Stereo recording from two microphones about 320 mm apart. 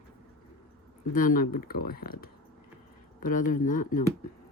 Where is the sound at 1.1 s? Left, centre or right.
Left.